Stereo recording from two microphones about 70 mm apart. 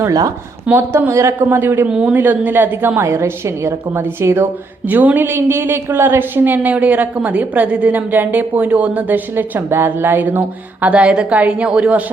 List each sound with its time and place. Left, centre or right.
0.7 s a woman's voice: right
1.4 s a woman's voice: right
1.9 s a woman's voice: centre; by 4.4 s right
4.9 s a woman's voice: right